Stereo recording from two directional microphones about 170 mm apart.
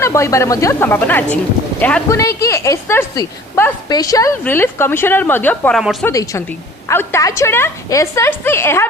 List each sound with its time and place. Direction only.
0.0 s a woman's voice: 15° left (ahead or behind)
5.8 s a woman's voice: centre (ahead or behind)
6.1 s a woman's voice: 15° left (ahead or behind)